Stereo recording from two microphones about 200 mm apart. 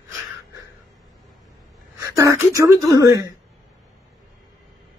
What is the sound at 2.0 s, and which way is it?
Speech, 15° right (ahead or behind).